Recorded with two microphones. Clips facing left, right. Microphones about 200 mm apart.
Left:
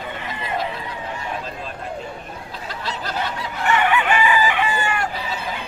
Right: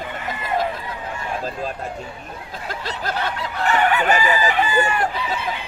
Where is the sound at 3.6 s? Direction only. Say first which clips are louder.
Right 1 dB; 35° right (ahead or behind).